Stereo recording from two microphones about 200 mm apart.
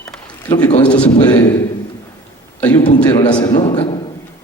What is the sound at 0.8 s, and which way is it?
Speech, 5° left (ahead or behind).